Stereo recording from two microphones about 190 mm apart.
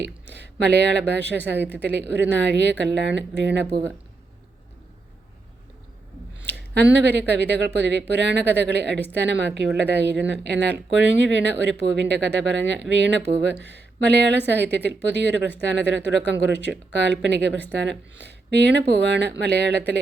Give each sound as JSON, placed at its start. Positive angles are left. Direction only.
{"t": 0.0, "sound": "speech", "side_deg": -65}
{"t": 6.4, "sound": "a sound", "side_deg": -65}
{"t": 6.9, "sound": "speech", "side_deg": -65}